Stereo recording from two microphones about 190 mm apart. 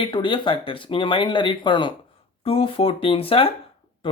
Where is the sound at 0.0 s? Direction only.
25° left (ahead or behind).